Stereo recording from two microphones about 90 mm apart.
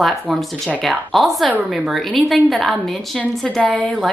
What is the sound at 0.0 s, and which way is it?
Speech, centre (ahead or behind).